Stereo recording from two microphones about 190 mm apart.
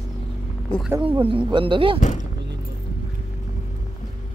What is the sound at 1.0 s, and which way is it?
Speech, 30° right (ahead or behind).